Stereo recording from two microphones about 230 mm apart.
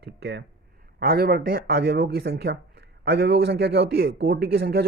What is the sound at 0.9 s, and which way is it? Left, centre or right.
Speech, right.